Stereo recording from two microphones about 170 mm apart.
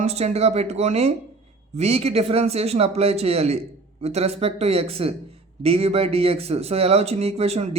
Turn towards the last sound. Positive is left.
turn(degrees=-35)  # may be behind; listen again after turning